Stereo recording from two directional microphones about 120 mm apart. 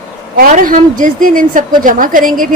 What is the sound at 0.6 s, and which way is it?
A woman's voice, 90° right.